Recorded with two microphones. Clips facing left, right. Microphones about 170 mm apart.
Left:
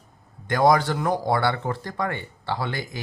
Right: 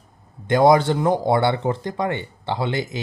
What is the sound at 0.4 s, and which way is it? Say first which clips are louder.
Speech: right 4 dB; 25° right (ahead or behind).